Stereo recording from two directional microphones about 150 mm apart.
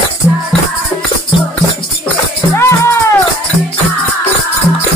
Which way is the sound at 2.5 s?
15° left (ahead or behind).